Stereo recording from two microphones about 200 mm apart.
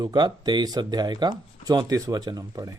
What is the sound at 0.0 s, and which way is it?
Speech, 20° right (ahead or behind).